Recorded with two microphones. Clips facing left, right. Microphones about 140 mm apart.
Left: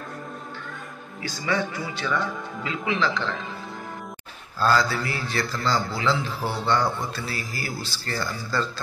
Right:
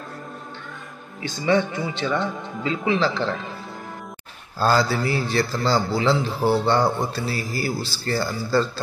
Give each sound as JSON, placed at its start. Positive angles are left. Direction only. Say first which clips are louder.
{"t": 1.2, "sound": "speech", "louder": "right 6 dB", "side_deg": -25}
{"t": 4.6, "sound": "speech", "louder": "right 2 dB", "side_deg": -30}